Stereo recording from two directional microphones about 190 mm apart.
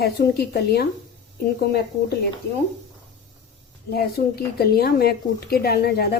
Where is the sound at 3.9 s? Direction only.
55° left (ahead or behind).